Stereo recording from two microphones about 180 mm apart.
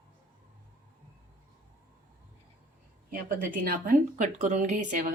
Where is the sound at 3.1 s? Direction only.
50° right (ahead or behind).